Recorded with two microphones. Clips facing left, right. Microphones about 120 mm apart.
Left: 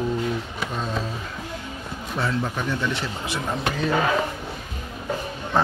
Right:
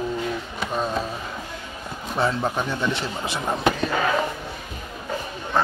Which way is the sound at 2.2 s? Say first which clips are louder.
Right 3 dB; 25° right (ahead or behind).